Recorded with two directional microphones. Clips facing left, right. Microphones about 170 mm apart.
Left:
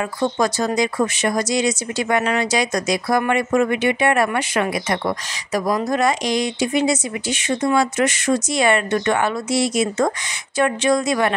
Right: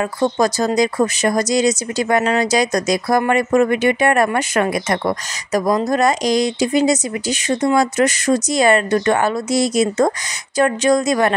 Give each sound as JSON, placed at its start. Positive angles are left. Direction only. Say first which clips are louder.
{"t": 0.0, "sound": "speech", "louder": "right 3 dB", "side_deg": -40}